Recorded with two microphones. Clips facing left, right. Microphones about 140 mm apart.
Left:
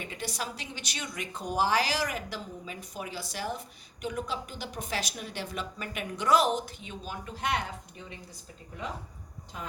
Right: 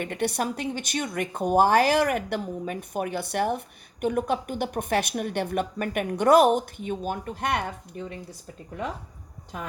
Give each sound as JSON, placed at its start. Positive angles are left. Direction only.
{"t": 0.0, "sound": "a woman's voice", "side_deg": -60}